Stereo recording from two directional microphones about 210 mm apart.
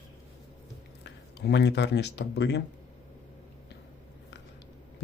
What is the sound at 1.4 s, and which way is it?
Speech, 55° left (ahead or behind).